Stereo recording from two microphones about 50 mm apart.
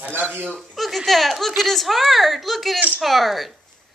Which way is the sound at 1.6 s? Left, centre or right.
Centre.